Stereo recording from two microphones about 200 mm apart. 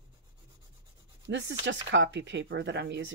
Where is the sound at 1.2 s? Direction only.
65° right (ahead or behind).